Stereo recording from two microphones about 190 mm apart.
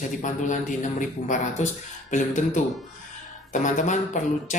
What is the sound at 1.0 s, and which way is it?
A man's voice, 40° left (ahead or behind).